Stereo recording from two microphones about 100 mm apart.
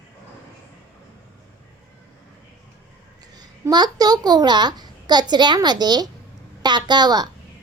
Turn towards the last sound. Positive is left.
turn(degrees=-45)  # may be behind; listen again after turning